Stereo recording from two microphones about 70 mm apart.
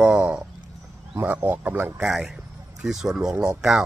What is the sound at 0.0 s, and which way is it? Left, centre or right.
Speech, centre.